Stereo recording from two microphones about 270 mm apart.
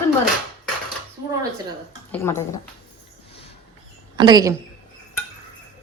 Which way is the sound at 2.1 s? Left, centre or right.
Centre.